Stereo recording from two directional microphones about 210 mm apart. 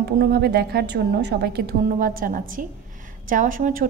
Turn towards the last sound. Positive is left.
turn(degrees=-40)  # may be behind; listen again after turning